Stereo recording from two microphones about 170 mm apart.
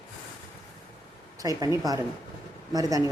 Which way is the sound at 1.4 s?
20° right (ahead or behind).